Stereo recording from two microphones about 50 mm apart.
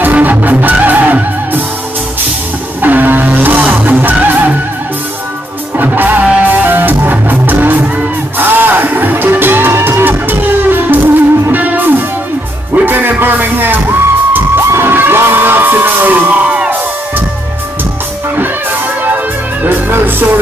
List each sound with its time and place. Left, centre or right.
0.0 s music: right
2.8 s music: right
5.9 s music: right
14.6 s crowd: right
14.9 s music: right
18.3 s music: right